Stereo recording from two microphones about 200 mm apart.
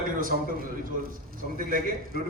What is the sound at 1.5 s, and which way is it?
Speech, 45° right (ahead or behind).